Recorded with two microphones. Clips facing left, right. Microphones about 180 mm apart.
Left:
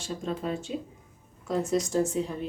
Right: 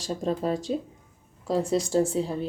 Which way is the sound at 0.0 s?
35° right (ahead or behind).